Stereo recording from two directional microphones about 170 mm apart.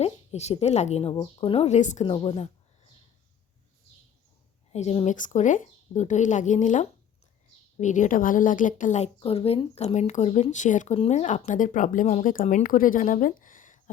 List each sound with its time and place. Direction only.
0.0 s speech: 40° left (ahead or behind)
2.0 s speech: 35° left (ahead or behind)
4.7 s a woman's voice: 40° left (ahead or behind)